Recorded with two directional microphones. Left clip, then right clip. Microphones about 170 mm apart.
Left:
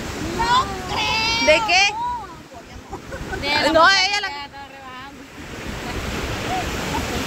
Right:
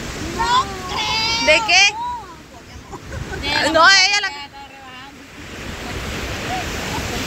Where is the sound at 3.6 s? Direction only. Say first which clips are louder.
Right 3 dB; centre (ahead or behind).